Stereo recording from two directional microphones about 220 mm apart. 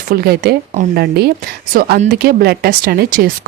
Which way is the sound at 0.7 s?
35° right (ahead or behind).